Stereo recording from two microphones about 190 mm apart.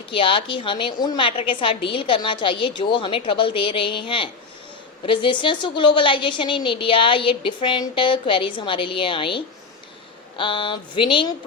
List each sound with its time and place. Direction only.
0.1 s a woman's voice: 25° left (ahead or behind)